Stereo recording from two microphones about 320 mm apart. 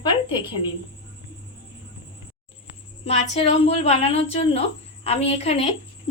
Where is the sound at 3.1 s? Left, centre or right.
Centre.